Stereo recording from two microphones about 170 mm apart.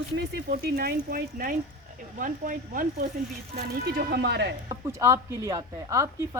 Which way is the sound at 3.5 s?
65° right (ahead or behind).